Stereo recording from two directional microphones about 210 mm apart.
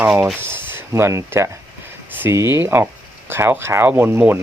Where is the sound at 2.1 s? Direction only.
10° right (ahead or behind).